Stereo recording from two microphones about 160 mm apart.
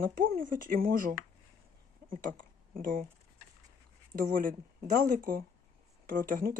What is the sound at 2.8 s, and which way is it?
Speech, 60° right (ahead or behind).